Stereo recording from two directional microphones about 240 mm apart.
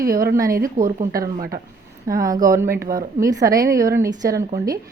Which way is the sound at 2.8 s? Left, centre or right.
Right.